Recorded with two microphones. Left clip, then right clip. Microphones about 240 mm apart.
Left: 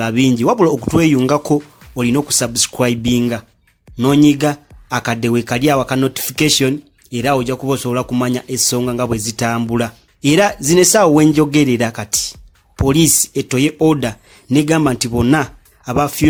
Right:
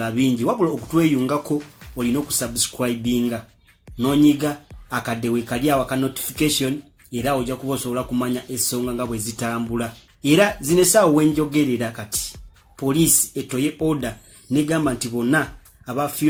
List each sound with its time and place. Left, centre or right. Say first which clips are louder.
0.0 s speech: left 6 dB; left